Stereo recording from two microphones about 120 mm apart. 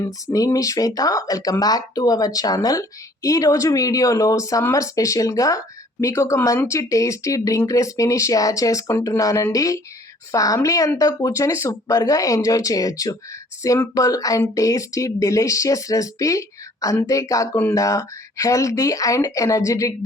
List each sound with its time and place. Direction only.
0.0 s speech: 25° left (ahead or behind)